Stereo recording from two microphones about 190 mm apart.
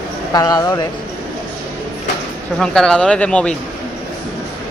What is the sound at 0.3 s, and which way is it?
Speech, 20° left (ahead or behind).